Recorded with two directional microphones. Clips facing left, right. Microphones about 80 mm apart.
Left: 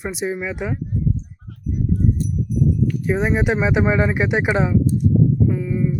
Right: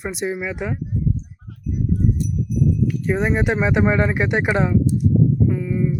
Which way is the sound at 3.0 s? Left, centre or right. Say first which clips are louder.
Left 1 dB; centre.